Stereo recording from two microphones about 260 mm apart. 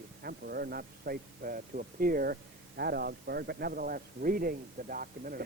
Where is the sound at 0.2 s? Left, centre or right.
Right.